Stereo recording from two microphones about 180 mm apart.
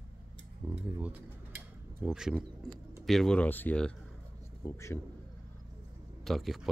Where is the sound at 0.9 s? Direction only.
5° right (ahead or behind); by 4.9 s 15° left (ahead or behind).